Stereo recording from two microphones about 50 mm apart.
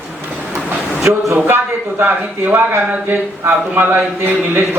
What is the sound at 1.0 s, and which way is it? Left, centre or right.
Speech, right.